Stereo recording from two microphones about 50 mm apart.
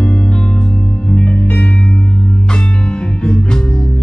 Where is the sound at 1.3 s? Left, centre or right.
Left.